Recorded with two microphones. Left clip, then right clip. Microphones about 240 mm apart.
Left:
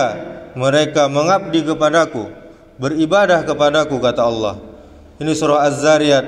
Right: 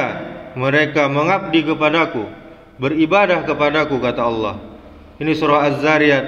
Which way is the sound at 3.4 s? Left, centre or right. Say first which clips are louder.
Left 2 dB; left.